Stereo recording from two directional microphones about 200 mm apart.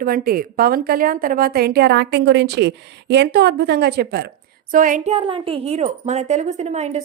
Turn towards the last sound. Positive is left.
turn(degrees=-35)  # may be behind; listen again after turning